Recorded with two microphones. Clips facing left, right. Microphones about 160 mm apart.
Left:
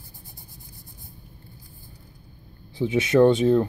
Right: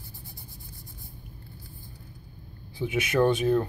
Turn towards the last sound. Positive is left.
turn(degrees=20)  # may be behind; listen again after turning